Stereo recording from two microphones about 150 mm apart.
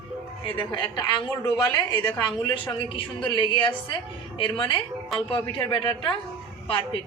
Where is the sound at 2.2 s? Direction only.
25° left (ahead or behind).